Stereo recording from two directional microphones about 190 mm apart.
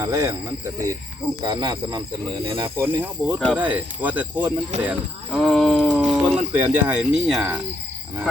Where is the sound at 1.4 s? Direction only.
25° right (ahead or behind).